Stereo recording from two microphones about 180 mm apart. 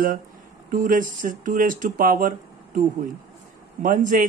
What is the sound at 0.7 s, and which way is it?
Speech, 50° right (ahead or behind).